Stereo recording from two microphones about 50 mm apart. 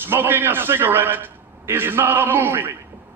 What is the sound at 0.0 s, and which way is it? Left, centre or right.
A man's voice, right.